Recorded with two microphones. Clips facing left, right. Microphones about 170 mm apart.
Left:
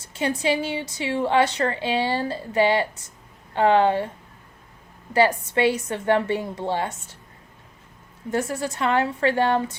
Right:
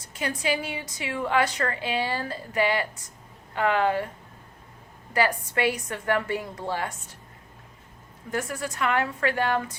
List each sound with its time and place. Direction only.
0.0 s a woman's voice: 25° left (ahead or behind)
5.1 s a woman's voice: 25° left (ahead or behind)
8.3 s a woman's voice: 30° left (ahead or behind)